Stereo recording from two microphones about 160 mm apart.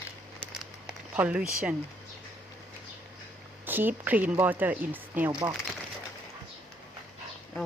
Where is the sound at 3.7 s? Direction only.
10° right (ahead or behind).